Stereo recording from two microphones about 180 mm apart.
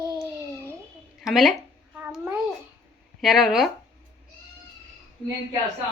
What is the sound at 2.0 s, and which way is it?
Babbling, 10° right (ahead or behind).